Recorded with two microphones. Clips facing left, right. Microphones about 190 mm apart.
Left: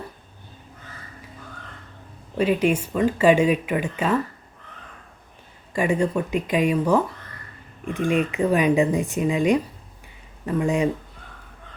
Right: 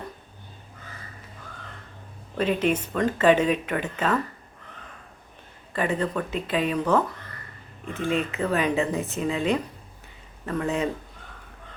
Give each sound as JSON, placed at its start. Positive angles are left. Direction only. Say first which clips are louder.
{"t": 2.3, "sound": "speech", "louder": "left 3 dB", "side_deg": 10}
{"t": 5.7, "sound": "speech", "louder": "left 4 dB", "side_deg": 10}